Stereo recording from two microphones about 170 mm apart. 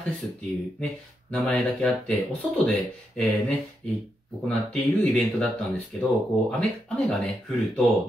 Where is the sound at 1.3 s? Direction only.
5° left (ahead or behind).